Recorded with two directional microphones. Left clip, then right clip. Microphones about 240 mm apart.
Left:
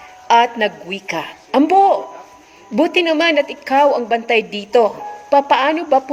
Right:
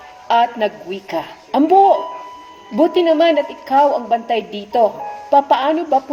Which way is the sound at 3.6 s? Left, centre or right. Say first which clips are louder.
Even; centre.